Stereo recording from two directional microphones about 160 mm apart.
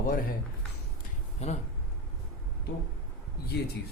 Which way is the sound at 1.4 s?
40° left (ahead or behind).